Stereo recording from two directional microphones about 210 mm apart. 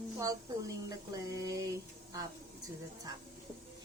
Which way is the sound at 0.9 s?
15° right (ahead or behind).